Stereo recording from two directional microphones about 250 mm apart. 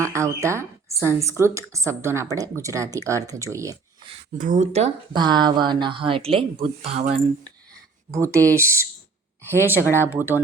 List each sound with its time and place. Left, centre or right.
0.0 s a woman's voice: centre
4.4 s speech: right
8.1 s a woman's voice: centre
9.8 s speech: centre
10.1 s a woman's voice: centre